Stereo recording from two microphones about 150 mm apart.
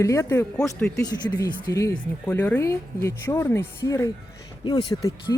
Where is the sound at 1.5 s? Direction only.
25° left (ahead or behind).